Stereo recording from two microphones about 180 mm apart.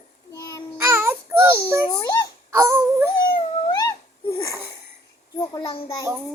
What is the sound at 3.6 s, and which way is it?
Babbling, 20° left (ahead or behind).